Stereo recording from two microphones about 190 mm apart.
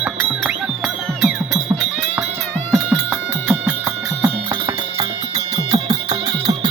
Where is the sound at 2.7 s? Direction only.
5° right (ahead or behind).